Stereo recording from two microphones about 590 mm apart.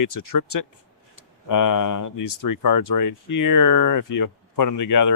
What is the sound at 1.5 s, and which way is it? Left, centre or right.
Speech, left.